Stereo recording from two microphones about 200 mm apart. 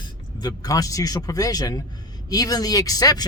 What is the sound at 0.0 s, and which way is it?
A woman's voice, 20° left (ahead or behind).